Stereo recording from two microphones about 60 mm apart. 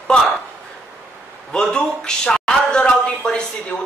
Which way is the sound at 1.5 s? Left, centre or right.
Centre.